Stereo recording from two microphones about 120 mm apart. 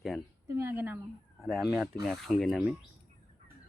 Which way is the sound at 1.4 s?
Centre (ahead or behind).